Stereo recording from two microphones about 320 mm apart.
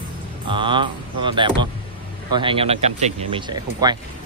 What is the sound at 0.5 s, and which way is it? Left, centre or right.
Speech, centre.